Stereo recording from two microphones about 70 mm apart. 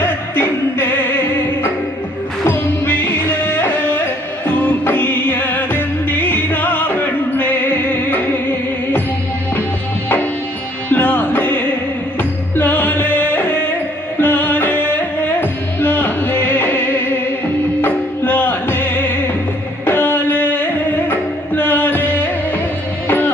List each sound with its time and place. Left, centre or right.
0.0 s music: left
2.4 s music: left
10.8 s music: left